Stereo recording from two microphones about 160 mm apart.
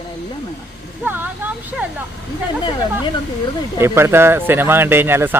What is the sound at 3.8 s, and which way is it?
Speech, 15° right (ahead or behind).